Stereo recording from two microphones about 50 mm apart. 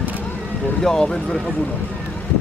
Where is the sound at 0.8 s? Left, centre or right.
Centre.